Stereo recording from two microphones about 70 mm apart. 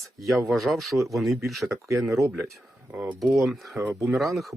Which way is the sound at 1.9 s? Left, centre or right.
Right.